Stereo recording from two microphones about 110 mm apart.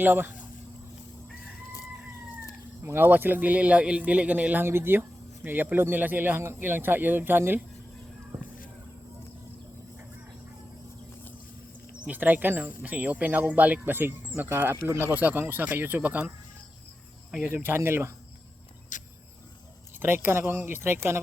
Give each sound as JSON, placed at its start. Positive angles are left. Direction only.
{"t": 0.0, "sound": "speech", "side_deg": -15}
{"t": 2.8, "sound": "speech", "side_deg": -20}
{"t": 12.0, "sound": "speech", "side_deg": -15}
{"t": 17.5, "sound": "speech", "side_deg": -20}
{"t": 20.0, "sound": "speech", "side_deg": -20}